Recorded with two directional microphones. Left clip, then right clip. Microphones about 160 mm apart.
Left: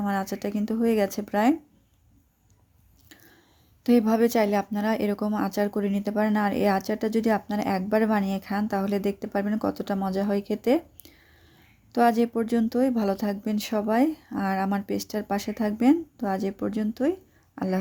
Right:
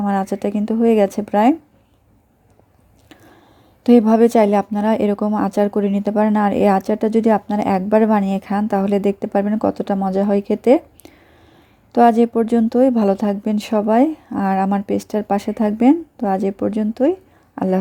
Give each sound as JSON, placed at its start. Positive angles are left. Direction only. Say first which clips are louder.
{"t": 0.0, "sound": "speech", "louder": "right 9 dB", "side_deg": -35}
{"t": 3.8, "sound": "speech", "louder": "right 9 dB", "side_deg": -35}